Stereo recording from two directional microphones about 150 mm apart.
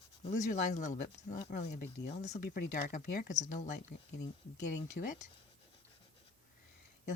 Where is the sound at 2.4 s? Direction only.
80° left; by 3.7 s 55° left (ahead or behind).